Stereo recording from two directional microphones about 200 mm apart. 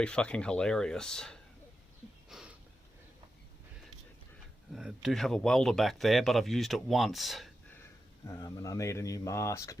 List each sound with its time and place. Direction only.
0.0 s speech: 5° left (ahead or behind)
2.3 s a sound: centre (ahead or behind)
4.7 s speech: centre (ahead or behind)
8.3 s speech: 15° left (ahead or behind)